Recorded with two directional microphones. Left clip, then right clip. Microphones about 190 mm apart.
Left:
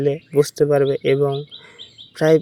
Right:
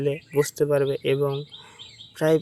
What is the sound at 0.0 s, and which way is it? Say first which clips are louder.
Speech: left 6 dB; 15° left (ahead or behind).